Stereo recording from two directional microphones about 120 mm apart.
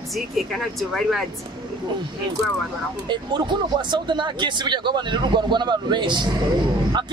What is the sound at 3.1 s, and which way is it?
Speech, 40° right (ahead or behind).